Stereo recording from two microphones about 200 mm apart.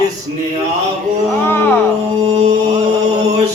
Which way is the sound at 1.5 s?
10° left (ahead or behind).